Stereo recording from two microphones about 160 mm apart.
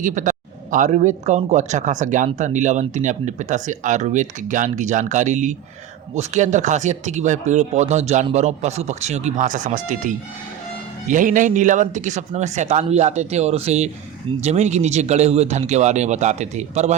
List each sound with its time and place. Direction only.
0.0 s a man's voice: 50° right (ahead or behind)